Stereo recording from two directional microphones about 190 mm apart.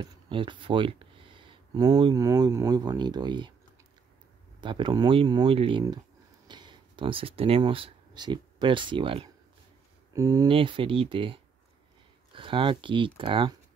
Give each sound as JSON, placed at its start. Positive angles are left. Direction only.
{"t": 0.0, "sound": "speech", "side_deg": -25}
{"t": 4.6, "sound": "speech", "side_deg": -25}
{"t": 10.1, "sound": "speech", "side_deg": -15}